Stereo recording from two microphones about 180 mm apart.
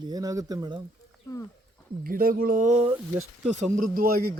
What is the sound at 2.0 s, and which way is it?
Speech, 55° right (ahead or behind).